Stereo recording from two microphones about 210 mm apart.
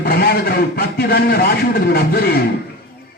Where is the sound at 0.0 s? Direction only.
45° left (ahead or behind).